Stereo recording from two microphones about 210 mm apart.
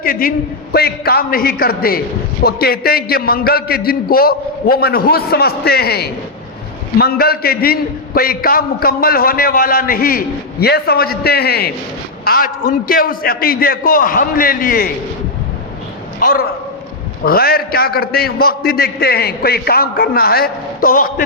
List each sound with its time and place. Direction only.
0.0 s a man's voice: 40° left (ahead or behind)
16.2 s a man's voice: 45° left (ahead or behind)